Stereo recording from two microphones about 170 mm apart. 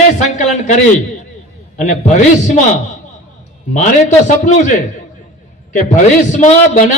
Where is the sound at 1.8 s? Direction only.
45° left (ahead or behind).